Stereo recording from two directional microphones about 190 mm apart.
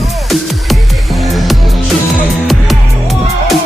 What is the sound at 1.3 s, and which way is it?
Music, centre (ahead or behind).